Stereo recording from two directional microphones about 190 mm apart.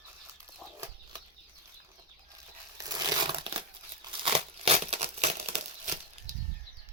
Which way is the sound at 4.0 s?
30° right (ahead or behind).